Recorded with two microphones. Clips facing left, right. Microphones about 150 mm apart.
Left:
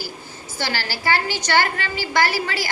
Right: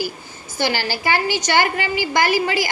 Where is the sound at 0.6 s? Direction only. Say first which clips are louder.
Right 4 dB; 15° right (ahead or behind).